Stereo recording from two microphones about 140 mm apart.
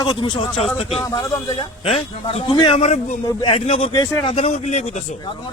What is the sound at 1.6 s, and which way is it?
A man's voice, 45° left (ahead or behind).